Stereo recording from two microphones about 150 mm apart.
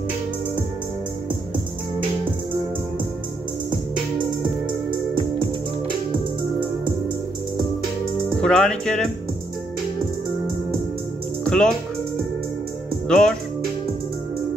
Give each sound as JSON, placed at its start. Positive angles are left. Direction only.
{"t": 8.4, "sound": "speech", "side_deg": 5}
{"t": 11.4, "sound": "music", "side_deg": 5}
{"t": 13.1, "sound": "speech", "side_deg": 5}